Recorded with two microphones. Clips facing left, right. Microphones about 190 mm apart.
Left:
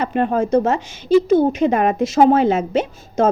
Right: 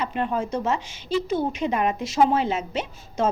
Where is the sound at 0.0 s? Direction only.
50° left (ahead or behind).